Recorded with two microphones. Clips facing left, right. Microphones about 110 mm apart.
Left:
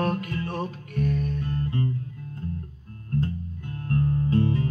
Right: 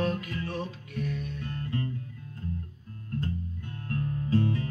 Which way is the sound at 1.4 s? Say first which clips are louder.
Left 5 dB; 30° left (ahead or behind).